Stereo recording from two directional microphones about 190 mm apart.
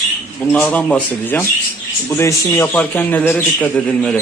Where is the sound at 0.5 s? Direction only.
5° left (ahead or behind).